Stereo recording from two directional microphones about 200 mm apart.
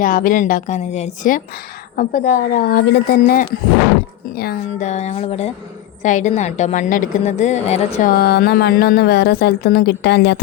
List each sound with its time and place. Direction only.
0.0 s a woman's voice: 45° left (ahead or behind)
4.9 s a woman's voice: 35° left (ahead or behind)
8.1 s a woman's voice: 55° left (ahead or behind)